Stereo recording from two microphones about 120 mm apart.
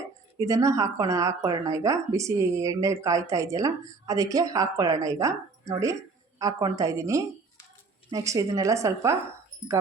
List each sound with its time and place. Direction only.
0.3 s a woman's voice: 30° right (ahead or behind)